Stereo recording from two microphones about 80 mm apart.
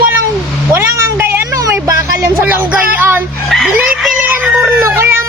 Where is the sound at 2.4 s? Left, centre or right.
Right.